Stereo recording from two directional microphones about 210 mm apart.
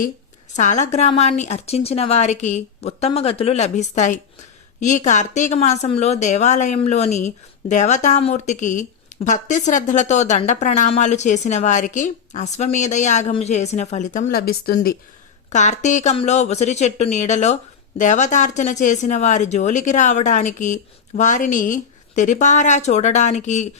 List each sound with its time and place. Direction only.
0.5 s a woman's voice: 35° left (ahead or behind)
15.4 s a woman's voice: 35° left (ahead or behind)